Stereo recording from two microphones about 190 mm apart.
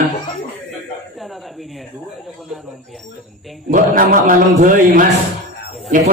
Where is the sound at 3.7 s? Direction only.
45° right (ahead or behind).